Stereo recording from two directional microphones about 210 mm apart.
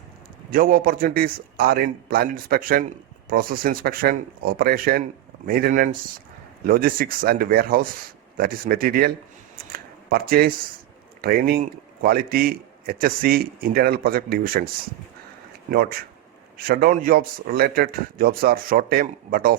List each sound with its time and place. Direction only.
0.5 s speech: 45° right (ahead or behind)
9.7 s a sound: 45° right (ahead or behind)
11.2 s speech: 45° right (ahead or behind)
15.7 s speech: 45° right (ahead or behind)